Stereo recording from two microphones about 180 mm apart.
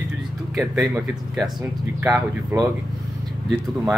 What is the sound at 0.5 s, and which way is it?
Speech, 5° right (ahead or behind).